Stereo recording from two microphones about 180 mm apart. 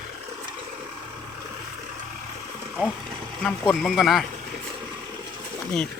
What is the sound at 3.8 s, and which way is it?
Speech, centre (ahead or behind).